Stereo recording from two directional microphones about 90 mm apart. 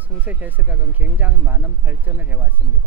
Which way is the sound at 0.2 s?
20° right (ahead or behind).